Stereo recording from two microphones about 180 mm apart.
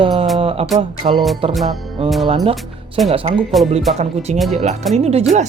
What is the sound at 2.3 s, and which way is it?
Speech, 30° right (ahead or behind).